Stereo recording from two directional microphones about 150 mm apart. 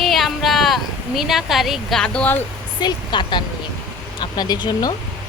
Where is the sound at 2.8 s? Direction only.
30° left (ahead or behind).